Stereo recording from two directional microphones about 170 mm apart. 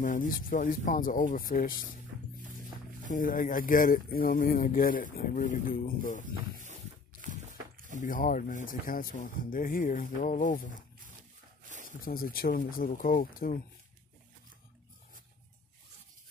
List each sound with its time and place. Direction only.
0.0 s speech: 50° left (ahead or behind)
3.1 s speech: 55° left (ahead or behind)
8.0 s speech: 55° left (ahead or behind)
11.7 s a sound: 50° right (ahead or behind)
12.0 s speech: 60° left (ahead or behind)